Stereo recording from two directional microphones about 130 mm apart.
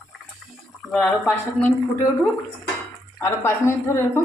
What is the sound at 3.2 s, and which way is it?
Speech, 20° left (ahead or behind).